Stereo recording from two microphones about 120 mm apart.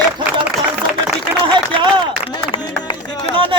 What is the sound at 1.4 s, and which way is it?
Run, 40° right (ahead or behind).